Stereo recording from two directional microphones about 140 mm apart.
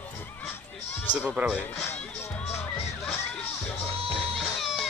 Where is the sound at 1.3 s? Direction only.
5° right (ahead or behind).